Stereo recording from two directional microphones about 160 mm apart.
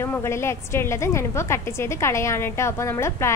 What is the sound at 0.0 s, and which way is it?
A woman's voice, 15° left (ahead or behind).